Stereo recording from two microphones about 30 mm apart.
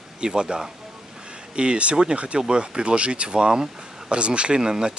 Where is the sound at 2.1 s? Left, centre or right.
Right.